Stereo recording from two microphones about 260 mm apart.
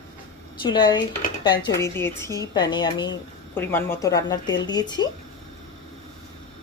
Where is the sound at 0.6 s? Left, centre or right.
Centre.